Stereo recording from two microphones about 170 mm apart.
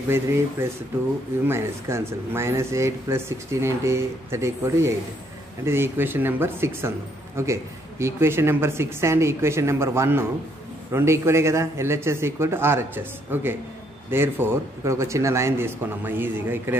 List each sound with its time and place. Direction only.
0.1 s speech: 15° right (ahead or behind)